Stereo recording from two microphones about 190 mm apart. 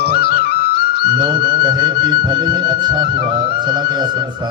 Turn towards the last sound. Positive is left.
turn(degrees=-20)  # may be behind; listen again after turning